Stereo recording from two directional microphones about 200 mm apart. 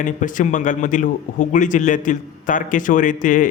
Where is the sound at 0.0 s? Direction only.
40° left (ahead or behind).